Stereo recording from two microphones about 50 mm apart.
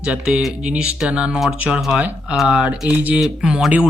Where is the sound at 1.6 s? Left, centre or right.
Right.